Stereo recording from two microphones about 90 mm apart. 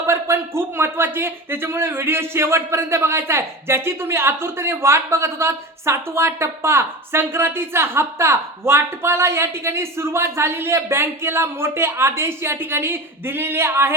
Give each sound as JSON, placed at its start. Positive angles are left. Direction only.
{"t": 0.0, "sound": "speech", "side_deg": -30}